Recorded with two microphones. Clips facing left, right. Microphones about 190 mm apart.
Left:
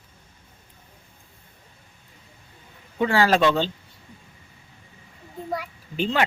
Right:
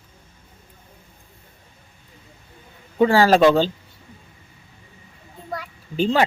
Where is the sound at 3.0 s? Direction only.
35° right (ahead or behind).